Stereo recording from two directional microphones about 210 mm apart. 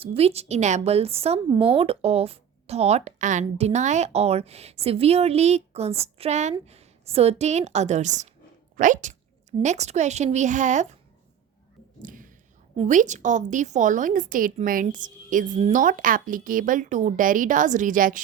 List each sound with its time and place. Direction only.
0.0 s a woman's voice: 30° right (ahead or behind)
12.0 s whispering: 40° right (ahead or behind)
12.7 s a woman's voice: 30° right (ahead or behind)